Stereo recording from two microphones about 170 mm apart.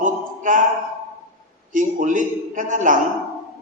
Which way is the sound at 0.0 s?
50° right (ahead or behind).